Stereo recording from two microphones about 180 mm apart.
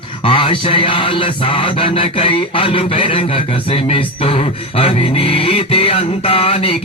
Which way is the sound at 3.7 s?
35° left (ahead or behind).